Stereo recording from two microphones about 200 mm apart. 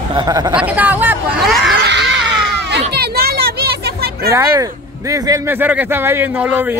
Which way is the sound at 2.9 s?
50° right (ahead or behind).